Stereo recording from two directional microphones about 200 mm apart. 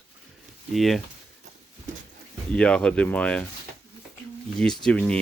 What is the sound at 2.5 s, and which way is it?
Speech, 5° left (ahead or behind).